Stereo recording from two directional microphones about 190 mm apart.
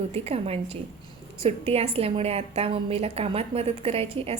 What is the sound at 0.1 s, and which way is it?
A woman's voice, 30° right (ahead or behind).